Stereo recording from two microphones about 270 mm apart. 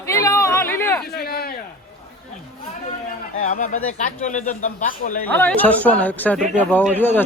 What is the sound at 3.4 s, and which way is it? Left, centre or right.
Speech, left.